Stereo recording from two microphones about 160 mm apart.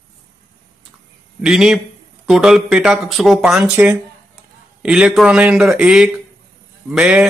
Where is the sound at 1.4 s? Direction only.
5° right (ahead or behind).